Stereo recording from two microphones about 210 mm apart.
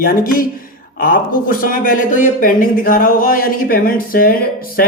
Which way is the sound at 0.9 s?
40° left (ahead or behind).